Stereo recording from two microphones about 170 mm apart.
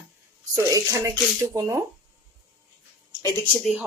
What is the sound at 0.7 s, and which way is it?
Speech, 20° right (ahead or behind).